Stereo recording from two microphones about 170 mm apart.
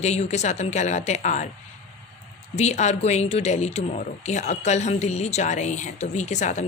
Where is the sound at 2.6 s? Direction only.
40° left (ahead or behind).